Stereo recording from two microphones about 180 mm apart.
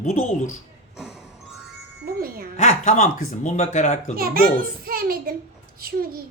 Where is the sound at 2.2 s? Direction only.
55° right (ahead or behind).